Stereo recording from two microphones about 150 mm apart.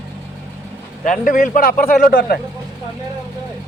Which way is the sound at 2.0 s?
90° left.